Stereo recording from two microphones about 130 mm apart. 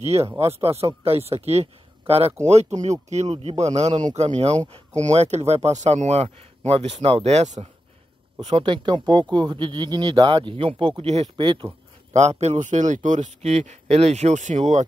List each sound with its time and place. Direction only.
0.0 s a man's voice: 55° right (ahead or behind)
8.4 s speech: 40° right (ahead or behind)
12.1 s a man's voice: 60° right (ahead or behind)